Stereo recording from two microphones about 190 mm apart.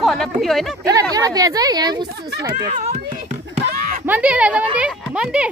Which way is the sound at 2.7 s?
35° right (ahead or behind).